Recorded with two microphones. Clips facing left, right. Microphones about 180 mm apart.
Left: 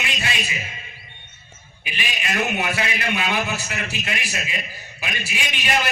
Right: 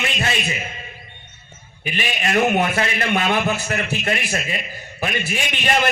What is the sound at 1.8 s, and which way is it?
A man's voice, 50° right (ahead or behind).